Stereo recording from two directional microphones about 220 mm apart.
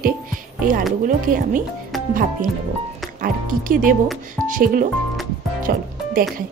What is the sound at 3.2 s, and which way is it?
A woman's voice, 40° right (ahead or behind).